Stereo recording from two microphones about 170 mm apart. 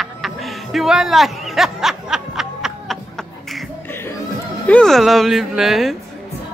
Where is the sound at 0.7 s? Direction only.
Centre (ahead or behind).